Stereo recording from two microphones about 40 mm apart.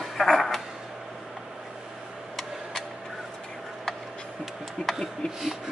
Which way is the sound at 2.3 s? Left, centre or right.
Centre.